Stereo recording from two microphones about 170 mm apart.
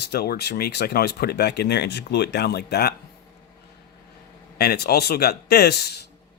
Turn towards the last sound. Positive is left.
turn(degrees=70)  # may be behind; listen again after turning